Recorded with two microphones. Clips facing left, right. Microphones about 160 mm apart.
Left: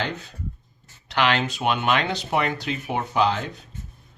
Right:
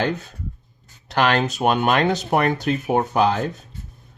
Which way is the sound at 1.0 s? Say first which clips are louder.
Right 3 dB; 45° right (ahead or behind).